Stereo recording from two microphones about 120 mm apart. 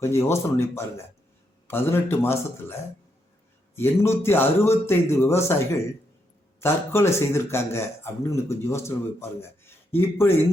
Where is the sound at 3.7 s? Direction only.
20° left (ahead or behind).